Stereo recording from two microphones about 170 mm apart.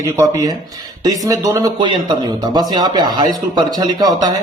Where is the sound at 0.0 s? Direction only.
20° right (ahead or behind).